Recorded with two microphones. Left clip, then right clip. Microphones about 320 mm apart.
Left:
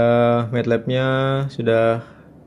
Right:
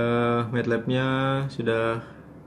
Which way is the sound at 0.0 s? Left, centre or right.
Left.